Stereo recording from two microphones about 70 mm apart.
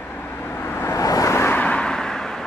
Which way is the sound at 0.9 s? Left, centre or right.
Left.